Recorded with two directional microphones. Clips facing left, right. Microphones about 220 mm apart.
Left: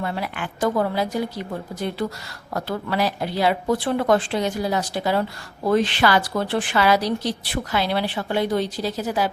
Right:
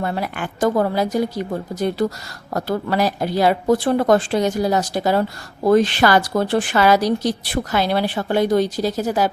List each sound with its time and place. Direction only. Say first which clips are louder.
0.0 s a woman's voice: right 3 dB; 45° right (ahead or behind)